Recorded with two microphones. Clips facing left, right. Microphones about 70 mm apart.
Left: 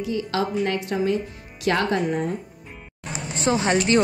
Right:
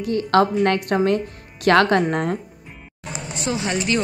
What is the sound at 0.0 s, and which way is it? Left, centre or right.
A woman's voice, right.